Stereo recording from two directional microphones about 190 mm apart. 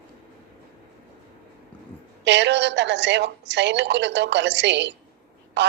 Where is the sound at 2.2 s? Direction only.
65° right (ahead or behind).